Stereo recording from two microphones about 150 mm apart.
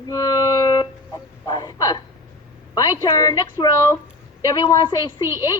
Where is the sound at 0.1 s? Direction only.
25° left (ahead or behind).